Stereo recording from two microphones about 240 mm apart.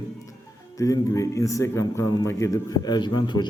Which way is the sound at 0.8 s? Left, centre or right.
Centre.